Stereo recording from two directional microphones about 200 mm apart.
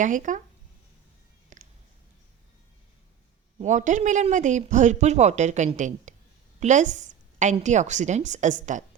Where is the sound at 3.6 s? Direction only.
35° right (ahead or behind).